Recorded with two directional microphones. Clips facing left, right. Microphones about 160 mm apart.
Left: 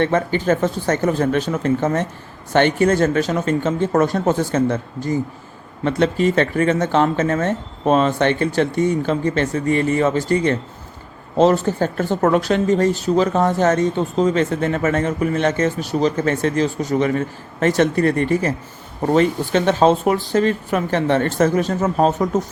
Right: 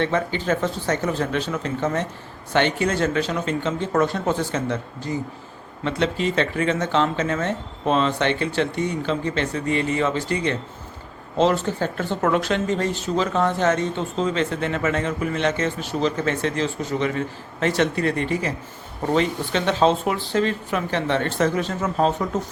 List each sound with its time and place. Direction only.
0.0 s speech: 50° left (ahead or behind)